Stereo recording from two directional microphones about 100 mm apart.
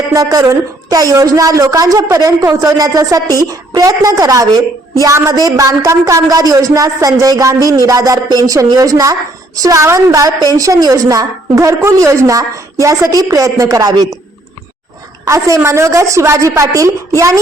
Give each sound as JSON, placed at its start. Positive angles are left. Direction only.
{"t": 0.1, "sound": "a woman's voice", "side_deg": -35}
{"t": 15.3, "sound": "a woman's voice", "side_deg": -30}